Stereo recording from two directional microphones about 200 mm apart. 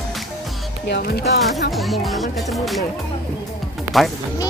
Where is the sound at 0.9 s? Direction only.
50° left (ahead or behind).